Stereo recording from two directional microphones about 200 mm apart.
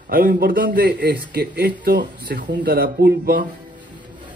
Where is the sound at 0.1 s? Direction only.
45° right (ahead or behind).